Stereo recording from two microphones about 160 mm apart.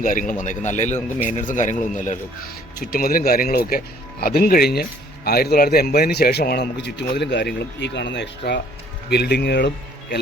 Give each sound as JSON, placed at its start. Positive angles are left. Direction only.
{"t": 0.0, "sound": "a man's voice", "side_deg": 55}